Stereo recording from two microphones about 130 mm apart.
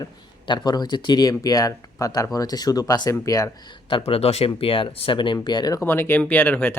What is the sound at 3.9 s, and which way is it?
Speech, 45° left (ahead or behind).